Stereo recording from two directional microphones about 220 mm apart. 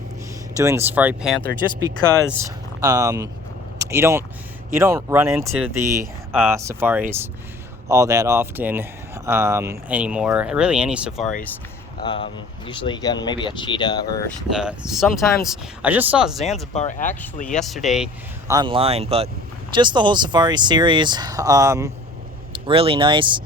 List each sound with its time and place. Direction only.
0.5 s speech: 15° right (ahead or behind)
5.3 s speech: centre (ahead or behind)
5.8 s speech: 15° right (ahead or behind)
12.0 s speech: 20° left (ahead or behind)
14.5 s speech: 5° right (ahead or behind)
16.7 s speech: 35° left (ahead or behind)
17.6 s speech: centre (ahead or behind)
18.4 s speech: 20° right (ahead or behind)